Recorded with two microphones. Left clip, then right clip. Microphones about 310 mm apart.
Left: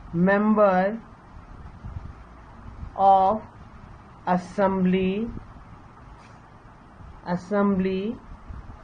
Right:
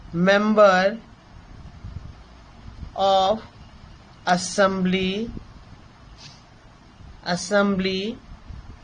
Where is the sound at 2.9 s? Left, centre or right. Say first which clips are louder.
Left 1 dB; right.